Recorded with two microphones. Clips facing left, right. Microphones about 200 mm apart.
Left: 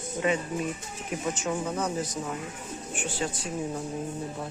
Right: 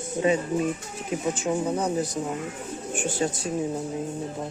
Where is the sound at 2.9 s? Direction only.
45° right (ahead or behind).